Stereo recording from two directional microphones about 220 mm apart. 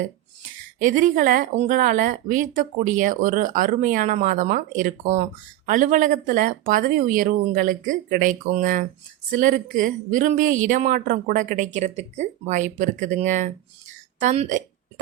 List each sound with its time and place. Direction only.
0.8 s a woman's voice: 35° right (ahead or behind)